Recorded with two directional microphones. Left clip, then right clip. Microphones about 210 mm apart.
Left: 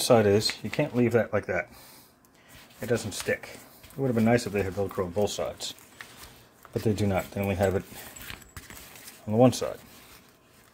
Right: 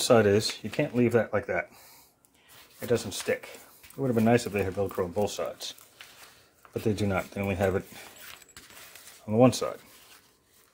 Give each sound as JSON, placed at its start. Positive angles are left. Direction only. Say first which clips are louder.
{"t": 0.0, "sound": "speech", "louder": "left 1 dB", "side_deg": -10}
{"t": 2.9, "sound": "speech", "louder": "even", "side_deg": -15}
{"t": 5.3, "sound": "speech", "louder": "left 2 dB", "side_deg": -5}
{"t": 9.3, "sound": "speech", "louder": "even", "side_deg": -10}